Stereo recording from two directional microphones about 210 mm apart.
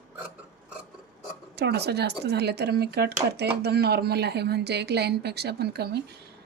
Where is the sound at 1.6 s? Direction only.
50° right (ahead or behind).